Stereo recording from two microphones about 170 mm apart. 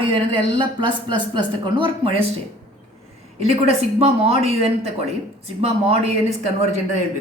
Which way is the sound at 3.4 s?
35° right (ahead or behind).